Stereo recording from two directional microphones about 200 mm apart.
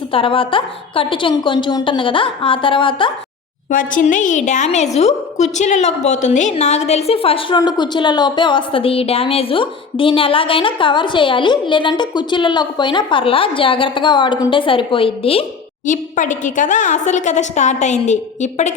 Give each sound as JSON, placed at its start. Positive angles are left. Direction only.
{"t": 0.1, "sound": "a woman's voice", "side_deg": 25}
{"t": 3.7, "sound": "a woman's voice", "side_deg": 40}
{"t": 15.9, "sound": "a woman's voice", "side_deg": 40}